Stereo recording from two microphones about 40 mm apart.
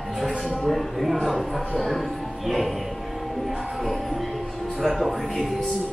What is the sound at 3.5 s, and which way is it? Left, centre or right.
Music, centre.